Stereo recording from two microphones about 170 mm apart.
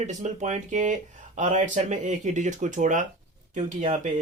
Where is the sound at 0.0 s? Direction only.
45° right (ahead or behind).